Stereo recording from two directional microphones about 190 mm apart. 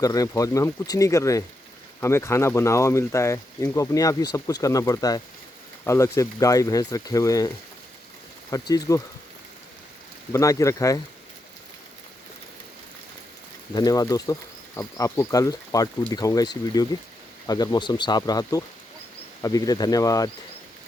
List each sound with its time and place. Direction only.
0.0 s speech: 20° left (ahead or behind)
10.3 s speech: 15° left (ahead or behind)
13.7 s speech: 20° left (ahead or behind)